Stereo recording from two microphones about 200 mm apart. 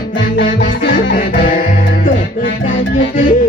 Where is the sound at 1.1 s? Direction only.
45° left (ahead or behind).